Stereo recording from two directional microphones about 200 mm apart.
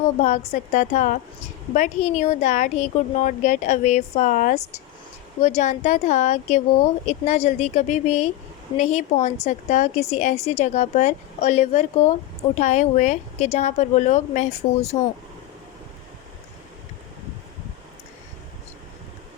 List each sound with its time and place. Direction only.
0.2 s a woman's voice: 35° left (ahead or behind)